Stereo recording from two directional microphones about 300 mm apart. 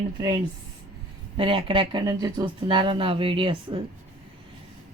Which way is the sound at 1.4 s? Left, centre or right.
Centre.